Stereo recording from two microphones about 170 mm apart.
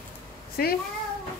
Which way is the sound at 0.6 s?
60° left (ahead or behind).